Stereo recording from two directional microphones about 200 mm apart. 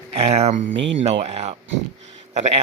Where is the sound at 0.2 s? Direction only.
30° right (ahead or behind).